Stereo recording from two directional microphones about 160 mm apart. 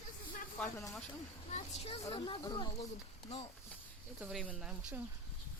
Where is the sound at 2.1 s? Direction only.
30° left (ahead or behind).